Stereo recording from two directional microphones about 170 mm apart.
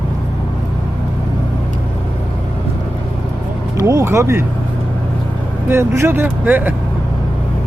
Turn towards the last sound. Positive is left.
turn(degrees=-10)  # may be behind; listen again after turning